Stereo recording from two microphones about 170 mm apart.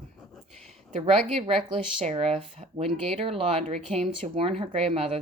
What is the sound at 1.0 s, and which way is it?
A woman's voice, 35° right (ahead or behind).